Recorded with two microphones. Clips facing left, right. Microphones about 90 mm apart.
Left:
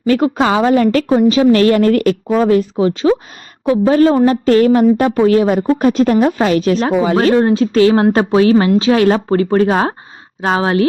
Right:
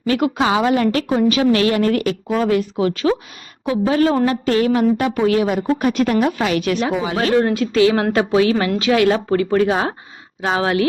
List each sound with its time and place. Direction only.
0.1 s speech: 40° left (ahead or behind)
1.1 s speech: 30° left (ahead or behind); by 2.3 s 45° left (ahead or behind)
2.3 s speech: 35° left (ahead or behind)
3.7 s speech: 35° left (ahead or behind)